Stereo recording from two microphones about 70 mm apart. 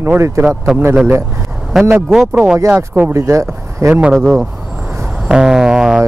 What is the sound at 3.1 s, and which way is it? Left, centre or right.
Speech, right.